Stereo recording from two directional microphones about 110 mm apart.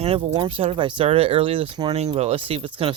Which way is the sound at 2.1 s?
70° right (ahead or behind).